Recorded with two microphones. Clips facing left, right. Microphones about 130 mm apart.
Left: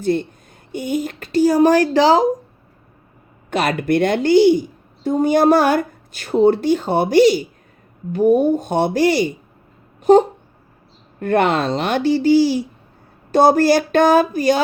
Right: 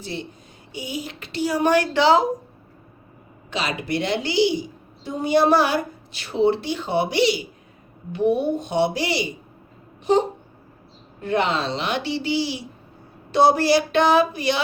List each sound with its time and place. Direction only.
0.0 s a woman's voice: 50° left (ahead or behind)
3.5 s a woman's voice: 55° left (ahead or behind)